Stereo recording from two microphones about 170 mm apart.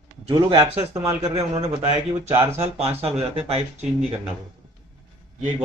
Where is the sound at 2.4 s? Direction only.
40° right (ahead or behind).